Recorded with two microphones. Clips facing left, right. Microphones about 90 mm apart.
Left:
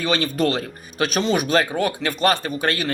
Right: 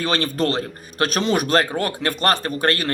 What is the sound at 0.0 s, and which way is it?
A man's voice, 40° right (ahead or behind).